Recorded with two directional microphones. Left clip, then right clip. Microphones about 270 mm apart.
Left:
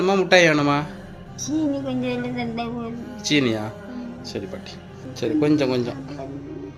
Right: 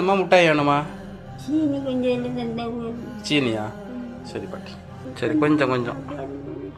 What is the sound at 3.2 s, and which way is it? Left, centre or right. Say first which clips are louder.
A man's voice: left 1 dB; centre.